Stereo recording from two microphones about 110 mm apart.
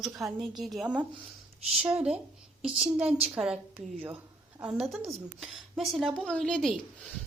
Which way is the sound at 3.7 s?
15° right (ahead or behind).